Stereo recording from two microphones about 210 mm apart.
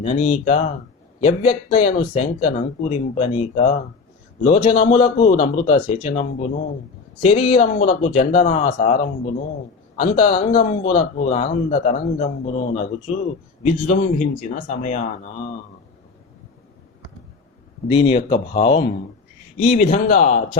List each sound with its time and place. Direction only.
0.0 s speech: 30° left (ahead or behind)
17.8 s speech: 25° left (ahead or behind)
19.6 s speech: 40° left (ahead or behind)